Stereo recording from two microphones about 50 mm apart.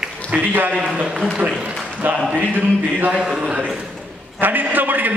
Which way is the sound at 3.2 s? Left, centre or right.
Centre.